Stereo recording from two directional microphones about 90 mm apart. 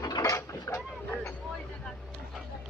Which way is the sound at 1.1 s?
15° left (ahead or behind).